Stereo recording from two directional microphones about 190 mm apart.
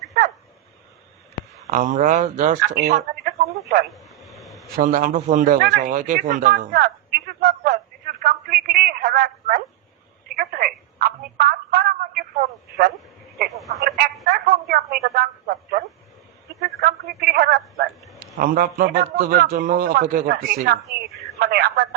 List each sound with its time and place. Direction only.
1.7 s a man's voice: 40° right (ahead or behind)
3.9 s a sound: centre (ahead or behind)
4.8 s a man's voice: 45° right (ahead or behind)
7.4 s a sound: 50° right (ahead or behind)
10.2 s telephone: 50° right (ahead or behind)
13.5 s speech: centre (ahead or behind)
14.3 s telephone: 50° right (ahead or behind)
16.6 s a man's voice: 60° right (ahead or behind)